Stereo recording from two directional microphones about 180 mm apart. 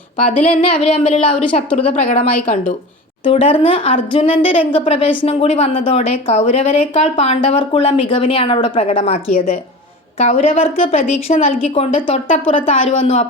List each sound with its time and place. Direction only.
0.2 s speech: 50° left (ahead or behind)
1.0 s speech: 35° left (ahead or behind)
2.1 s speech: 50° left (ahead or behind)
3.2 s speech: 30° left (ahead or behind)